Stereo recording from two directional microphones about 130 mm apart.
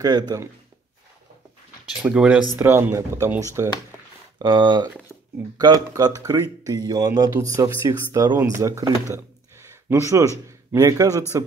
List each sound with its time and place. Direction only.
0.0 s speech: 30° right (ahead or behind)
1.9 s speech: 10° right (ahead or behind); by 11.4 s 25° right (ahead or behind)